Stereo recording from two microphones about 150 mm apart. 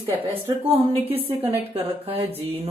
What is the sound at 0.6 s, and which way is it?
Speech, 40° right (ahead or behind).